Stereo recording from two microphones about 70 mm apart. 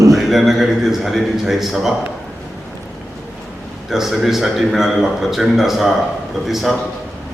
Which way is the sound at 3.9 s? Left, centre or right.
Centre.